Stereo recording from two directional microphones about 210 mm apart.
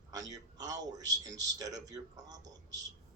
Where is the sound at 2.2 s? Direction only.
20° right (ahead or behind).